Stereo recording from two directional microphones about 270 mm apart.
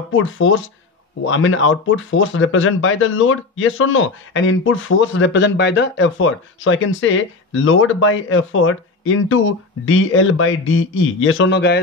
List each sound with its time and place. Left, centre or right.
0.1 s speech: left